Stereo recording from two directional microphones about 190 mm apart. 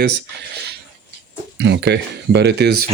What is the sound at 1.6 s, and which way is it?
Speech, 65° right (ahead or behind).